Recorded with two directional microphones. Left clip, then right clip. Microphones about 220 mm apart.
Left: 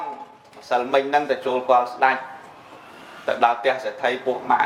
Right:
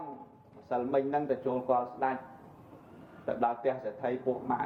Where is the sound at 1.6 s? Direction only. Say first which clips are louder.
Left 12 dB; 35° left (ahead or behind).